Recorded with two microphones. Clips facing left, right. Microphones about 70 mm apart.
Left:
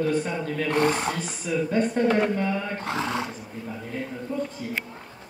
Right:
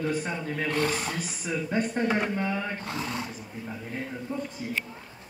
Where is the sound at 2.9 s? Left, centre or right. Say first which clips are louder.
Left 5 dB; left.